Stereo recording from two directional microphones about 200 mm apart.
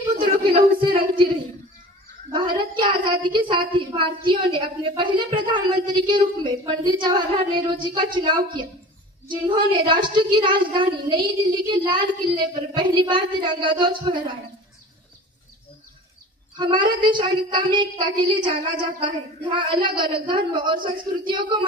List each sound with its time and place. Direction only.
0.6 s a sound: 50° right (ahead or behind)
2.3 s child singing: 25° right (ahead or behind)
3.2 s a woman's voice: 25° right (ahead or behind)
16.5 s a woman's voice: 25° right (ahead or behind)